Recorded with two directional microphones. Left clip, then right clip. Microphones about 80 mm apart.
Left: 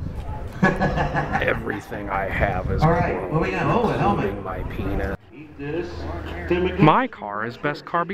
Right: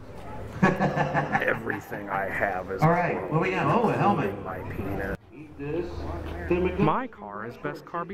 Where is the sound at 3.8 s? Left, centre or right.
Left.